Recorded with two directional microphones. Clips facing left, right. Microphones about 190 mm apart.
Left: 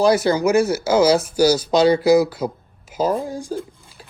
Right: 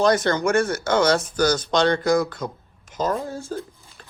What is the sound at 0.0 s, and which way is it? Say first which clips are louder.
Speech: left 3 dB; 10° left (ahead or behind).